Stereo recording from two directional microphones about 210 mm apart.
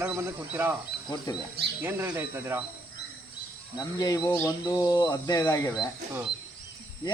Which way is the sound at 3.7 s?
20° left (ahead or behind).